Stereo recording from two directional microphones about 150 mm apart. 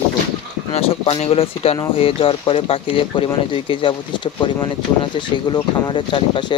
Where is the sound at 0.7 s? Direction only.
40° left (ahead or behind).